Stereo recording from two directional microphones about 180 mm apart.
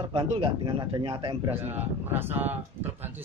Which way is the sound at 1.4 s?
10° right (ahead or behind).